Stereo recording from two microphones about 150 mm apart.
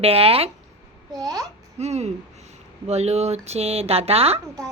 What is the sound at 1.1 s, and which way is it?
Speech, 25° right (ahead or behind).